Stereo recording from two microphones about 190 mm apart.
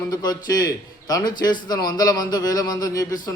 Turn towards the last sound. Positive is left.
turn(degrees=20)  # may be behind; listen again after turning